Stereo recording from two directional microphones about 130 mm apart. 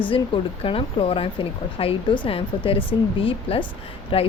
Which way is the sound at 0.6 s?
45° left (ahead or behind).